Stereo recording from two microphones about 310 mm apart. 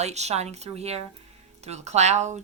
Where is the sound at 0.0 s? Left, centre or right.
Right.